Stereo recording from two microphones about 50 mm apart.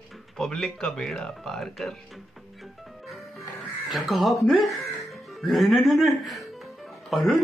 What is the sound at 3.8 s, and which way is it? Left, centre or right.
Speech, centre.